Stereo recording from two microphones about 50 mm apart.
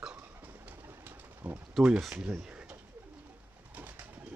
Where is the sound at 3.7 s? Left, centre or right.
Right.